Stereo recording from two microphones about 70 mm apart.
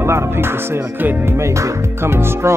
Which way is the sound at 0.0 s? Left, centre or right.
Right.